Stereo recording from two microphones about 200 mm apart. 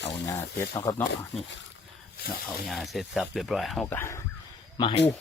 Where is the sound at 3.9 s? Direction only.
15° left (ahead or behind).